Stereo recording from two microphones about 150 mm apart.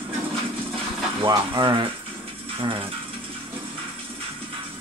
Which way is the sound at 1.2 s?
30° right (ahead or behind).